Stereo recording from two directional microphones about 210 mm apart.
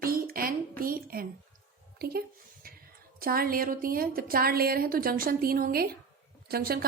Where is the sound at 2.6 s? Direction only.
45° right (ahead or behind).